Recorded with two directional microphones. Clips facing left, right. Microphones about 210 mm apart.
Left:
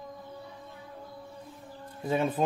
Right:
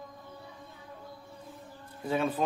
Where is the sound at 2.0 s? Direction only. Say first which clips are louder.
Left 2 dB; 20° left (ahead or behind).